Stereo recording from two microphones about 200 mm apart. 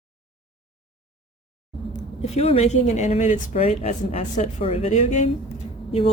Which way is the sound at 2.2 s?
30° left (ahead or behind).